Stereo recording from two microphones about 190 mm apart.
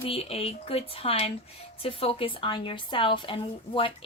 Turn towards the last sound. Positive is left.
turn(degrees=25)  # may be behind; listen again after turning